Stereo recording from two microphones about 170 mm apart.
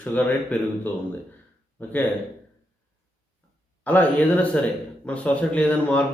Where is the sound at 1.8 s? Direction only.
10° left (ahead or behind).